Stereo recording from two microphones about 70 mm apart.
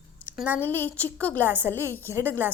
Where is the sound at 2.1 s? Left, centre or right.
Right.